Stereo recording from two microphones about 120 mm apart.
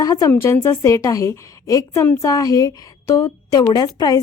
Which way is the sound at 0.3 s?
20° left (ahead or behind).